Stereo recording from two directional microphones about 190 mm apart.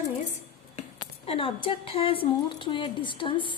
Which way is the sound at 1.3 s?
30° left (ahead or behind).